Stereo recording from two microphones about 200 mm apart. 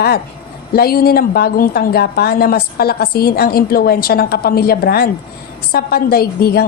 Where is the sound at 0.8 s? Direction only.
50° left (ahead or behind).